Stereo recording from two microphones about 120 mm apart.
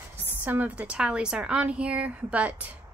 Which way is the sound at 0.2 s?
15° right (ahead or behind).